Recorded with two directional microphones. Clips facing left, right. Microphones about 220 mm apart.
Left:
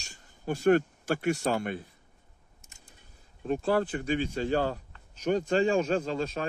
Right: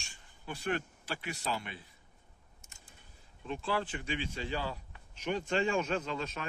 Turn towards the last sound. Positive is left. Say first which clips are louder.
# left 7 dB
turn(degrees=35)  # may be behind; listen again after turning